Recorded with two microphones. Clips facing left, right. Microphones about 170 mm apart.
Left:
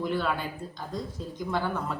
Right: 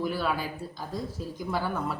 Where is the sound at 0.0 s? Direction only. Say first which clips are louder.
Even; 5° right (ahead or behind).